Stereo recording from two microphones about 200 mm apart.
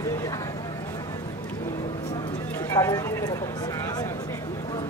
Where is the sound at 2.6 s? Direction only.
15° left (ahead or behind).